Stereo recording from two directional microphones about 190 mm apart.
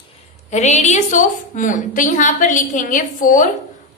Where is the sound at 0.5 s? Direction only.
35° left (ahead or behind).